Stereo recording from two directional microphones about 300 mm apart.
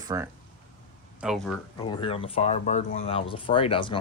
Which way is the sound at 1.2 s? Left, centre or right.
Centre.